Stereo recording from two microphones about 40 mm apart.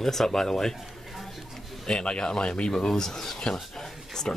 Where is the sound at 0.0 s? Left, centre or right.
Centre.